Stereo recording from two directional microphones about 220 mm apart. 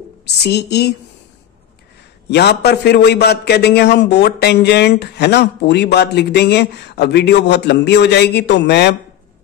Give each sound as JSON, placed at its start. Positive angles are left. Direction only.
{"t": 0.2, "sound": "a man's voice", "side_deg": 50}
{"t": 2.2, "sound": "a man's voice", "side_deg": 50}